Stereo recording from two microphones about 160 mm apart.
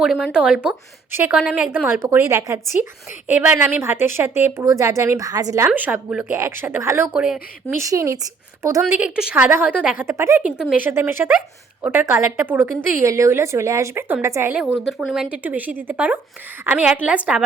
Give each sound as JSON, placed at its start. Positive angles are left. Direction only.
{"t": 0.0, "sound": "a woman's voice", "side_deg": -5}
{"t": 5.6, "sound": "a woman's voice", "side_deg": -10}
{"t": 7.8, "sound": "a woman's voice", "side_deg": -20}
{"t": 14.5, "sound": "a woman's voice", "side_deg": -5}